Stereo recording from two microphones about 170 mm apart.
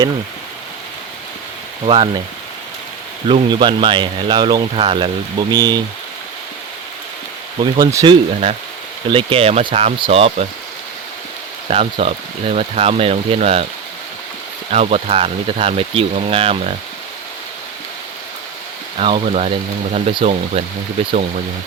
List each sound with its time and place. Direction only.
1.9 s speech: 30° right (ahead or behind)
3.2 s speech: 30° right (ahead or behind)
7.6 s speech: 20° right (ahead or behind); by 10.4 s 35° right (ahead or behind)
11.7 s speech: 35° right (ahead or behind)
14.7 s speech: 35° right (ahead or behind)
18.9 s speech: 35° right (ahead or behind)